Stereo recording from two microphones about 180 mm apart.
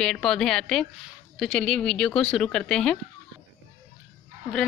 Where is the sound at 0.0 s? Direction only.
5° left (ahead or behind).